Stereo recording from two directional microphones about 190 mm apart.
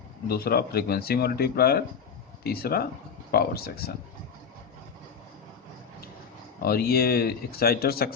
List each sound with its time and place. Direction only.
0.3 s speech: 55° left (ahead or behind)
6.6 s speech: 55° left (ahead or behind)